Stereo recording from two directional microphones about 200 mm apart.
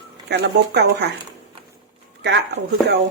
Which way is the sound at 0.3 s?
55° right (ahead or behind).